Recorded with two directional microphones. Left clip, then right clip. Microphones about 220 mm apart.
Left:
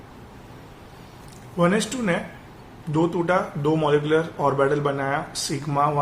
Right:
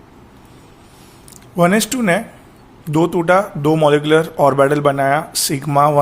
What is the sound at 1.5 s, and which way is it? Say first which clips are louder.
Speech: right 7 dB; 45° right (ahead or behind).